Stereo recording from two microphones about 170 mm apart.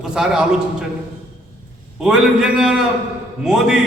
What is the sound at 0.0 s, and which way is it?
Speech, 5° right (ahead or behind).